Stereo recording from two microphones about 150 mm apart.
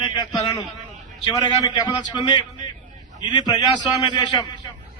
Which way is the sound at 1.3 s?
30° left (ahead or behind).